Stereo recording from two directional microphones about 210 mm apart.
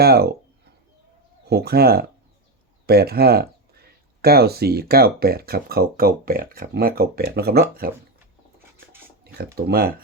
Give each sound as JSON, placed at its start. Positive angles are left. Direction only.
{"t": 0.0, "sound": "speech", "side_deg": -50}
{"t": 1.5, "sound": "speech", "side_deg": -50}
{"t": 9.2, "sound": "speech", "side_deg": -50}